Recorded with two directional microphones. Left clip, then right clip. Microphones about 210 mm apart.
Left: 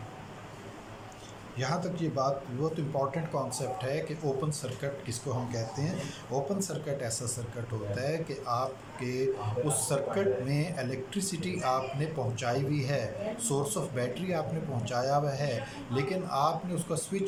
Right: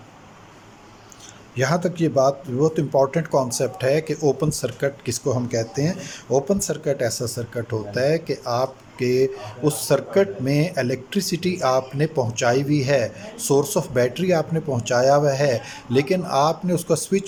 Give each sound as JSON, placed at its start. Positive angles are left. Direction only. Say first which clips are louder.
{"t": 1.5, "sound": "speech", "louder": "right 12 dB", "side_deg": -50}